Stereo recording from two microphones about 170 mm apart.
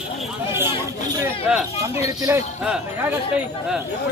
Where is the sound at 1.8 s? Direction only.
20° right (ahead or behind).